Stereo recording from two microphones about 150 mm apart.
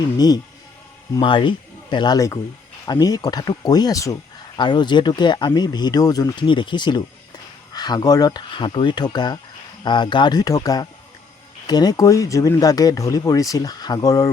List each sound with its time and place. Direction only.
0.2 s speech: 25° left (ahead or behind)